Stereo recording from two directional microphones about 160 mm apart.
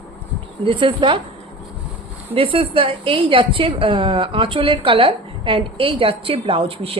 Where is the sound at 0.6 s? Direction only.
30° right (ahead or behind).